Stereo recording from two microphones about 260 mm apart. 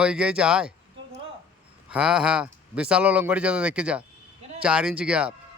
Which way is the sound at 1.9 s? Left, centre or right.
Centre.